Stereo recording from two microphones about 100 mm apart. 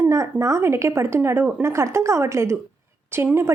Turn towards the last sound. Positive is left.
turn(degrees=-25)  # may be behind; listen again after turning